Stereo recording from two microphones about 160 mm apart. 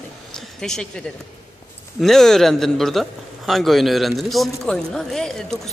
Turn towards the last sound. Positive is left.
turn(degrees=5)  # may be behind; listen again after turning